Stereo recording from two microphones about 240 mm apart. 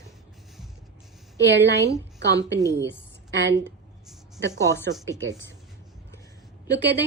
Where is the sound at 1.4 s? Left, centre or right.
Right.